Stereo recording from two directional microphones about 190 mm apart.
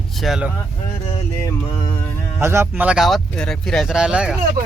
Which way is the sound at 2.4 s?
15° right (ahead or behind).